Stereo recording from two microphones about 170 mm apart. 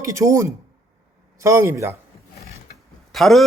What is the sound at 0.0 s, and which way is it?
Speech, 15° right (ahead or behind).